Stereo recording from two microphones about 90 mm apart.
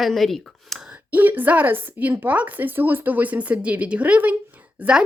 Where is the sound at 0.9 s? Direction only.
20° right (ahead or behind).